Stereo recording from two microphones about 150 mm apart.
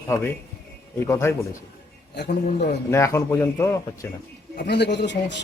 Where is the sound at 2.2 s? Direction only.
90° left.